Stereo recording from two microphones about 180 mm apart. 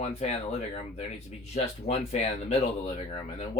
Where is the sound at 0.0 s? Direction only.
35° left (ahead or behind).